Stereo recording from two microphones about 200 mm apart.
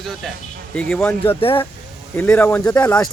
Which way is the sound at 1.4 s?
25° left (ahead or behind).